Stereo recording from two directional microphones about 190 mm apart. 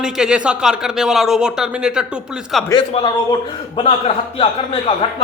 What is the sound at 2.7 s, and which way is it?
A man's voice, 25° left (ahead or behind).